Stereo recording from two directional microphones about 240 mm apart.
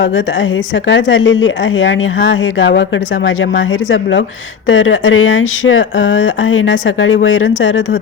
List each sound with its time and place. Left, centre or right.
0.9 s speech: left